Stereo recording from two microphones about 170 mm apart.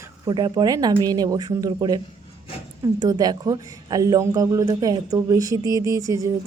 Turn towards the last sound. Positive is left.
turn(degrees=-20)  # may be behind; listen again after turning